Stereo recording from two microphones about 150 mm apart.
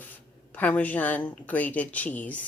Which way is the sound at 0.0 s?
10° left (ahead or behind).